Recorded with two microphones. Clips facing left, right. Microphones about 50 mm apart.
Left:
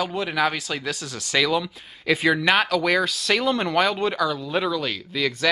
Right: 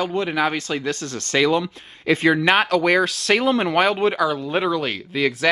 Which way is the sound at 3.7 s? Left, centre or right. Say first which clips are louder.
Right 3 dB; right.